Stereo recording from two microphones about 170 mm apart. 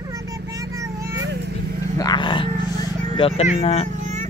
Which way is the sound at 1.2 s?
90° right.